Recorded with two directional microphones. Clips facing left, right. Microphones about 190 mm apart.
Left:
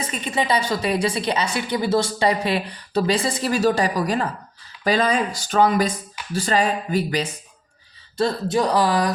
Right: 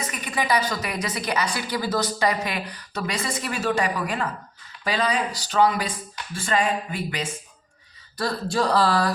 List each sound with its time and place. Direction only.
0.0 s a woman's voice: 25° left (ahead or behind)
8.2 s speech: 20° left (ahead or behind)